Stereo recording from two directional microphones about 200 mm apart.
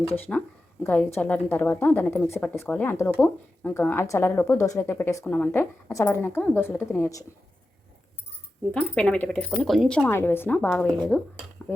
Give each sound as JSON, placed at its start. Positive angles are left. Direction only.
{"t": 0.3, "sound": "a woman's voice", "side_deg": 5}
{"t": 8.7, "sound": "speech", "side_deg": 5}
{"t": 10.1, "sound": "a woman's voice", "side_deg": 10}